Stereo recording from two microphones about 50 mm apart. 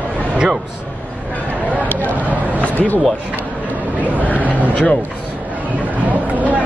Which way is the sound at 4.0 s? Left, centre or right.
Right.